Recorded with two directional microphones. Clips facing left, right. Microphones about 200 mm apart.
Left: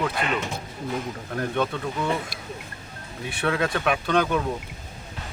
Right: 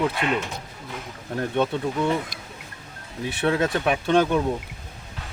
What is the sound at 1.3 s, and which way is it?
Speech, 25° right (ahead or behind).